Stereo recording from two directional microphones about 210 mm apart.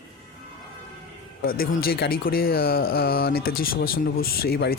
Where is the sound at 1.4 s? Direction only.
45° left (ahead or behind).